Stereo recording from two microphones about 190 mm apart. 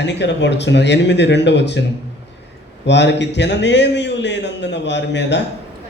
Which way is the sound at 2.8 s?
65° left (ahead or behind).